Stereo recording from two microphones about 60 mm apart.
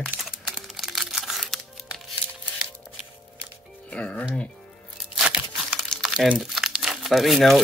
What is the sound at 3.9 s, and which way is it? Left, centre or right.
Speech, left.